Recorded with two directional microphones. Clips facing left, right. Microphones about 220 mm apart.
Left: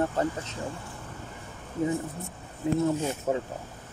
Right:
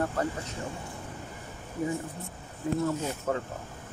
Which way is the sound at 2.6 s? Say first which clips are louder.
Left 3 dB; 25° left (ahead or behind).